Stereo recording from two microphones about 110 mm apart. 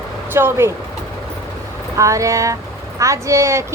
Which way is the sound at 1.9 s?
30° right (ahead or behind).